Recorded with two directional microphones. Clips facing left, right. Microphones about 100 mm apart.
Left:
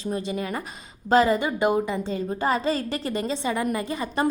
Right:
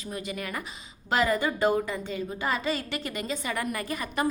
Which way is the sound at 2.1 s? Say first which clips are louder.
Left 5 dB; 35° left (ahead or behind).